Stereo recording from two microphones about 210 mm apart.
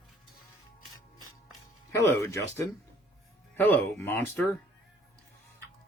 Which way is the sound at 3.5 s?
10° left (ahead or behind).